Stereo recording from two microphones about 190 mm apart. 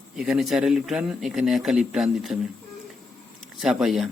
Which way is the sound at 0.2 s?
Centre (ahead or behind).